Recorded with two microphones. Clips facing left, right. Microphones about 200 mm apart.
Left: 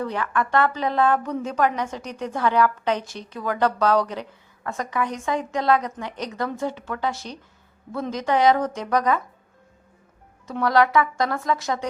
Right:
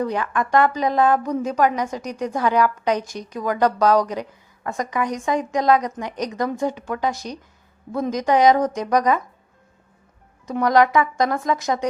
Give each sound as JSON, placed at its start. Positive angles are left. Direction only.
{"t": 0.0, "sound": "a woman's voice", "side_deg": -15}
{"t": 10.4, "sound": "a woman's voice", "side_deg": -15}